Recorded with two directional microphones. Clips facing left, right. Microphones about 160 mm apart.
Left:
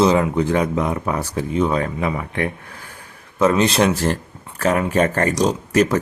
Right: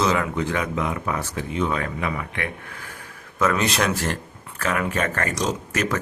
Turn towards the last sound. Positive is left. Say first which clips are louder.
# left 8 dB
turn(degrees=35)  # may be behind; listen again after turning